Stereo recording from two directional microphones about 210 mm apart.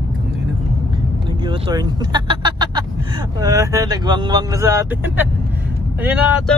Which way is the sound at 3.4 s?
15° right (ahead or behind).